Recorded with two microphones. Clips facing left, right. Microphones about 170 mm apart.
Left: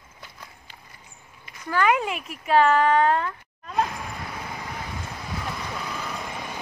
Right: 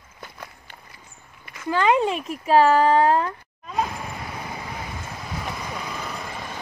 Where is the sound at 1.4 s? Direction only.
90° right.